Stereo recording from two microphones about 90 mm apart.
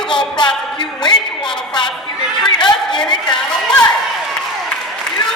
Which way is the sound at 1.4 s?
10° left (ahead or behind).